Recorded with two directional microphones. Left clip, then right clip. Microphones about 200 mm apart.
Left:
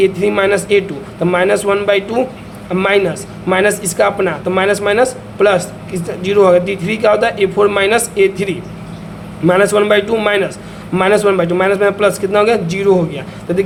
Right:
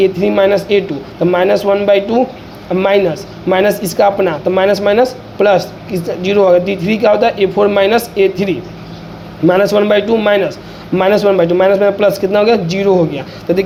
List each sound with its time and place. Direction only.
0.0 s speech: 10° right (ahead or behind)
13.5 s speech: 25° right (ahead or behind)